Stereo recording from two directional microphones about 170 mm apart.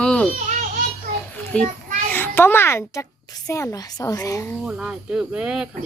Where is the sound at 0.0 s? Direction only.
5° left (ahead or behind).